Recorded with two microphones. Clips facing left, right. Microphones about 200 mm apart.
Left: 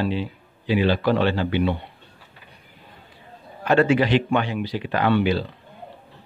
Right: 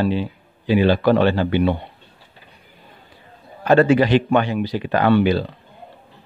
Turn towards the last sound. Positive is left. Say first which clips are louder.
# right 4 dB
turn(degrees=-45)  # may be behind; listen again after turning